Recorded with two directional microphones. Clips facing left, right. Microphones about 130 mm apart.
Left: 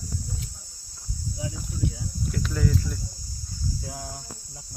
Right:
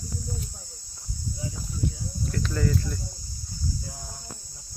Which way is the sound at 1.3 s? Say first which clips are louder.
Left 3 dB; 80° left.